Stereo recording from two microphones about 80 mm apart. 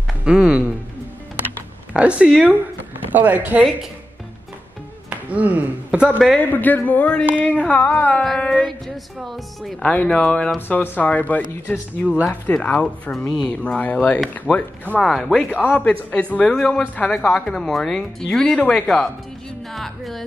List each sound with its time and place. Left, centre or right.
0.2 s a man's voice: centre
2.0 s a man's voice: centre
5.3 s a man's voice: centre
6.1 s music: centre
6.5 s a sound: left
8.4 s speech: centre
9.8 s speech: centre
10.7 s a sound: centre
12.6 s speech: centre
15.0 s music: centre
15.7 s speech: centre
19.7 s music: centre